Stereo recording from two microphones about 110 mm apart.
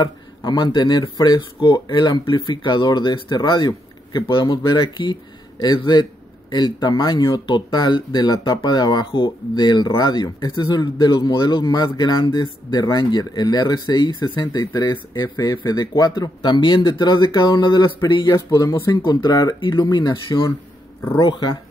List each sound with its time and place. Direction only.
0.0 s speech: 40° left (ahead or behind)
20.3 s speech: 25° left (ahead or behind)
21.2 s speech: 45° left (ahead or behind)